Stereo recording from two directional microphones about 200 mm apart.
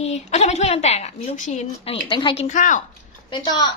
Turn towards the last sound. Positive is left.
turn(degrees=20)  # may be behind; listen again after turning